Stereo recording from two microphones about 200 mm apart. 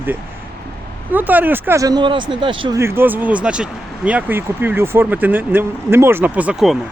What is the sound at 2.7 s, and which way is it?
Speech, 10° right (ahead or behind).